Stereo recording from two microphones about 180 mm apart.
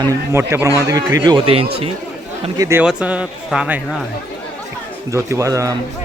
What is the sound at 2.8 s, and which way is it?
A man's voice, 5° right (ahead or behind).